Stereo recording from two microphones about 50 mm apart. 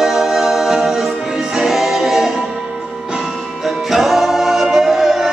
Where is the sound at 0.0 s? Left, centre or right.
Centre.